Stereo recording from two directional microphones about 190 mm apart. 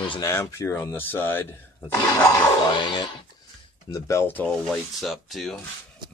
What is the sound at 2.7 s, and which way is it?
Speech, 25° left (ahead or behind).